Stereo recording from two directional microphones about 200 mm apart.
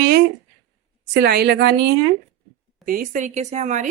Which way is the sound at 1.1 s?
55° right (ahead or behind).